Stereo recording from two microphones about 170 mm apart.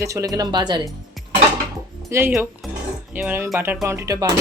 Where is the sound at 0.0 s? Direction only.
20° right (ahead or behind).